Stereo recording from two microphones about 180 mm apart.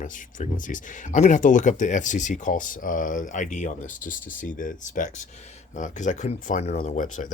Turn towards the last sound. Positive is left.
turn(degrees=45)  # may be behind; listen again after turning